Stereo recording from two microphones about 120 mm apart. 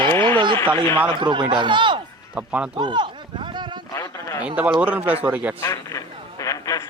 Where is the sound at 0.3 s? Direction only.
45° right (ahead or behind).